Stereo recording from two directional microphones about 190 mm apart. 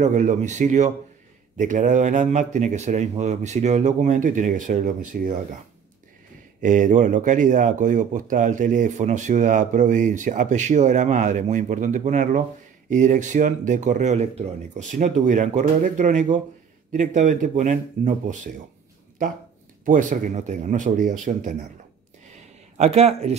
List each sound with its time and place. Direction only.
0.0 s speech: 40° right (ahead or behind)
6.6 s speech: 40° right (ahead or behind)
19.8 s speech: 45° right (ahead or behind)
22.8 s speech: 35° right (ahead or behind)